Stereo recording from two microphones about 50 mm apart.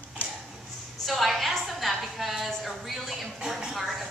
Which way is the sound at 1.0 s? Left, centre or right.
Centre.